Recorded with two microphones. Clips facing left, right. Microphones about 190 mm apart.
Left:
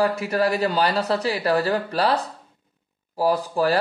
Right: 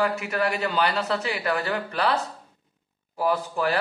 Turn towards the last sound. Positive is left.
turn(degrees=35)  # may be behind; listen again after turning